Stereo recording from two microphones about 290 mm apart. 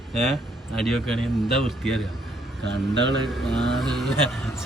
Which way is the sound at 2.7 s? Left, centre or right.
Right.